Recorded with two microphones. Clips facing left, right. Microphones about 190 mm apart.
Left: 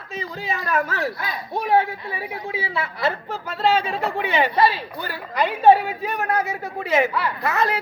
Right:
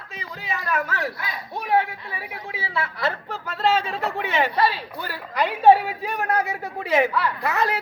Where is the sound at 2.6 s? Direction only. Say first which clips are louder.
Left 1 dB; 15° left (ahead or behind); by 4.5 s centre (ahead or behind).